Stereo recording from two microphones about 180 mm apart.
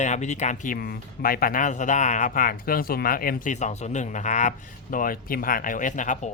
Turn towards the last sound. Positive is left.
turn(degrees=45)  # may be behind; listen again after turning